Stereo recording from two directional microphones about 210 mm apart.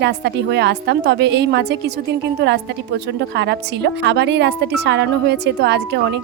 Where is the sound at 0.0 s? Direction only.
55° right (ahead or behind).